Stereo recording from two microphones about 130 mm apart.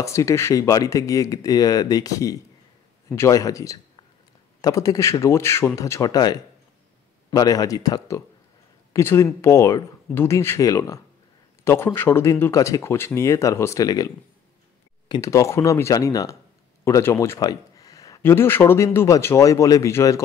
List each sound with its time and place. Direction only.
0.0 s speech: 25° left (ahead or behind)